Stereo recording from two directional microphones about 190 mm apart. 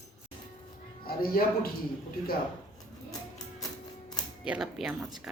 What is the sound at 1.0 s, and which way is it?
Speech, 50° left (ahead or behind).